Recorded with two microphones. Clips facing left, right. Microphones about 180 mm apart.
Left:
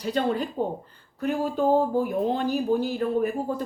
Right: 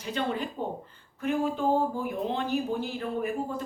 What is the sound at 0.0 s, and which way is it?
Speech, 35° left (ahead or behind).